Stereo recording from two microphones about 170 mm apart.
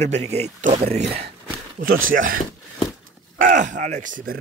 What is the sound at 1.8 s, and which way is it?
Speech, 55° right (ahead or behind).